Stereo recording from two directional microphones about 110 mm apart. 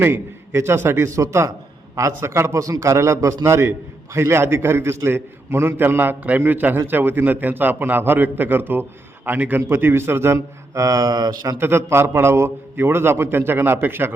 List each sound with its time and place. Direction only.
0.0 s a man's voice: 20° right (ahead or behind)
11.6 s a man's voice: 25° right (ahead or behind)